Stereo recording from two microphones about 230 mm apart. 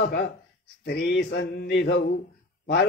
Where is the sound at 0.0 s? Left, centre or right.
Left.